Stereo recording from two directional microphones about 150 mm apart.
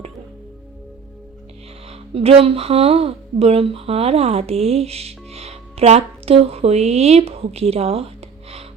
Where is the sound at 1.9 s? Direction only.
40° right (ahead or behind).